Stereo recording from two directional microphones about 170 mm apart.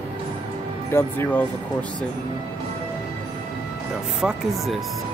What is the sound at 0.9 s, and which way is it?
Speech, 10° left (ahead or behind).